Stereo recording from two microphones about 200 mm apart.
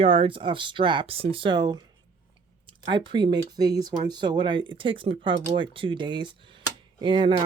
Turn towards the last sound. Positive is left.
turn(degrees=-25)  # may be behind; listen again after turning